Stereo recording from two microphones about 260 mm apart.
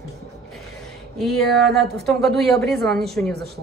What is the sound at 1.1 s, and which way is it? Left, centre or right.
A man's voice, centre.